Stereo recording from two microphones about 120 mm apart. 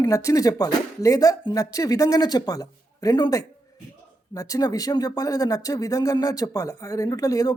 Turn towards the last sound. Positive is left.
turn(degrees=30)  # may be behind; listen again after turning